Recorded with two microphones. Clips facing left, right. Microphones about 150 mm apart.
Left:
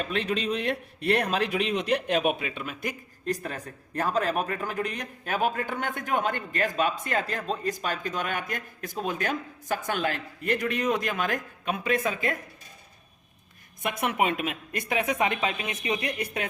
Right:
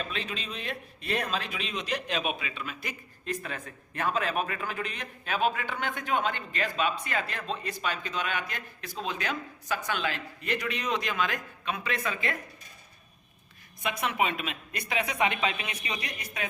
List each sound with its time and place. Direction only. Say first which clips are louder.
0.1 s a man's voice: left 9 dB; 65° left (ahead or behind); by 12.4 s 45° left (ahead or behind)
13.8 s a man's voice: left 3 dB; 55° left (ahead or behind)
16.0 s a man's voice: left 6 dB; 60° left (ahead or behind)